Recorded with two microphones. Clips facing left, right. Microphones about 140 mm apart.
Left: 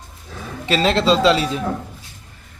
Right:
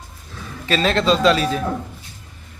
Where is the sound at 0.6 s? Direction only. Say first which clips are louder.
Left 1 dB; 25° left (ahead or behind).